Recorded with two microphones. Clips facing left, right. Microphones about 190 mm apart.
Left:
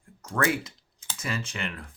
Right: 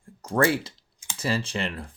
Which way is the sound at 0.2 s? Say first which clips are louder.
Right 5 dB; 30° right (ahead or behind).